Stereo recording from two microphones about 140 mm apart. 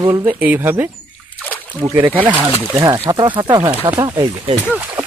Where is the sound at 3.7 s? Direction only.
10° right (ahead or behind).